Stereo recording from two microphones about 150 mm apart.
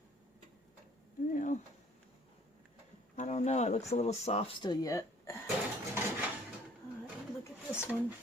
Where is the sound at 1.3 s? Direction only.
60° left (ahead or behind).